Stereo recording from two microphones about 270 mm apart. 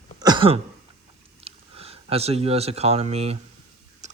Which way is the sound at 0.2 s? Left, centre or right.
Centre.